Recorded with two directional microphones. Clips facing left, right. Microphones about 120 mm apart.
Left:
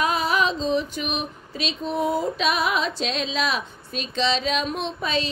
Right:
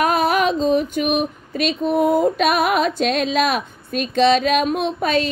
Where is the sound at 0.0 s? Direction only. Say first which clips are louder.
Right 5 dB; 55° right (ahead or behind).